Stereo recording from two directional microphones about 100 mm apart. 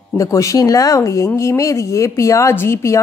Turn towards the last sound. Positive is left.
turn(degrees=30)  # may be behind; listen again after turning